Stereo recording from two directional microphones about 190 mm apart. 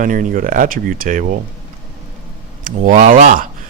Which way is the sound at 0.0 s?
45° right (ahead or behind).